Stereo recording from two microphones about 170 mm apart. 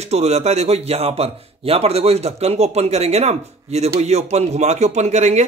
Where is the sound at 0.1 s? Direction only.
40° right (ahead or behind).